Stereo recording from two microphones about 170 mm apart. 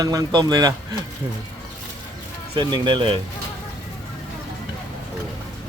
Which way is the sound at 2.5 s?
30° right (ahead or behind).